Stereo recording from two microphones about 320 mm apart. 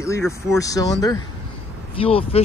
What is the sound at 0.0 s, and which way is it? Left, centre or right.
Speech, centre.